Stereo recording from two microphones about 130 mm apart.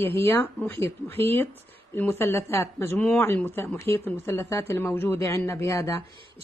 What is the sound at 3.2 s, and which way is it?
Speech, 20° left (ahead or behind).